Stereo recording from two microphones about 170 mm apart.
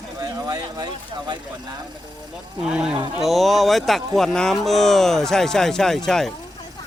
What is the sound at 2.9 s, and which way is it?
Speech, 30° right (ahead or behind).